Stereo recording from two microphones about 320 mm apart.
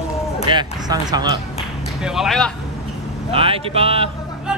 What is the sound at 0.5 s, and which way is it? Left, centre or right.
Speech, centre.